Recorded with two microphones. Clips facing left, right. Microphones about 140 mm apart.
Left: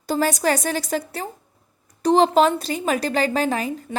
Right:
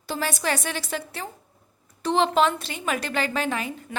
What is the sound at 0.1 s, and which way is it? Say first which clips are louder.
Speech: left 7 dB; 40° left (ahead or behind).